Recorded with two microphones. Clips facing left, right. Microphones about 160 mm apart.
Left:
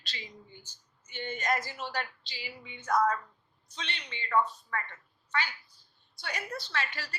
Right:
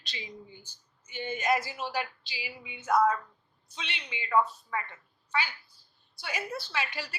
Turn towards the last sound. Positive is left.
turn(degrees=-10)  # may be behind; listen again after turning